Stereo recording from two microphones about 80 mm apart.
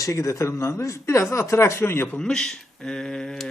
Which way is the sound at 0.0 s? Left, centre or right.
Left.